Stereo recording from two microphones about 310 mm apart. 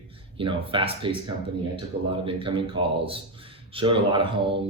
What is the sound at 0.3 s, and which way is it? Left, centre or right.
Speech, centre.